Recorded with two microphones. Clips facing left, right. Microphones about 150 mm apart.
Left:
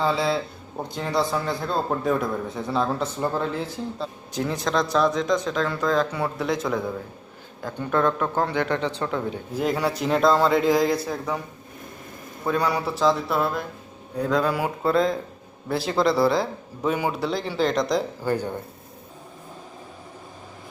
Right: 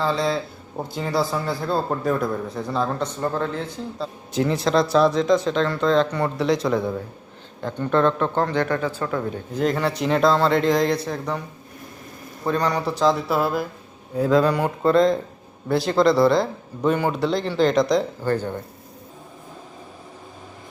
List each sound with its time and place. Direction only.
0.0 s a man's voice: 5° left (ahead or behind)
9.6 s a man's voice: 5° left (ahead or behind)
12.5 s a man's voice: 10° left (ahead or behind)